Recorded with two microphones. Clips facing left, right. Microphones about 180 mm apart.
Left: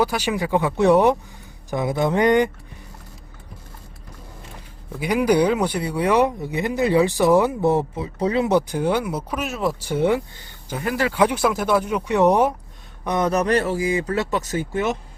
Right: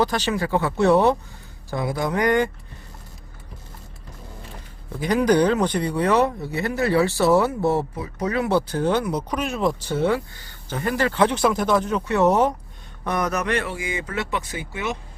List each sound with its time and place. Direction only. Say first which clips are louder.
0.0 s speech: even; 10° left (ahead or behind)
4.9 s speech: even; 10° left (ahead or behind)
10.8 s speech: left 1 dB; 5° left (ahead or behind)
13.1 s speech: left 4 dB; 25° left (ahead or behind); by 14.9 s 45° left (ahead or behind)